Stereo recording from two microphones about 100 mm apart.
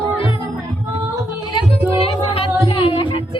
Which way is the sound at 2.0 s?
75° left (ahead or behind).